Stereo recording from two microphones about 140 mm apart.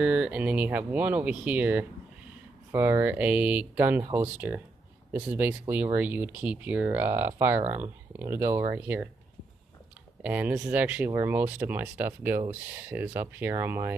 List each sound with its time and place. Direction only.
0.0 s speech: 10° right (ahead or behind)
10.2 s speech: 10° right (ahead or behind)